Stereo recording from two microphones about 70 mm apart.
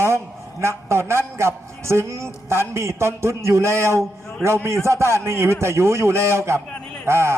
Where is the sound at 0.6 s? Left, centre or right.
Right.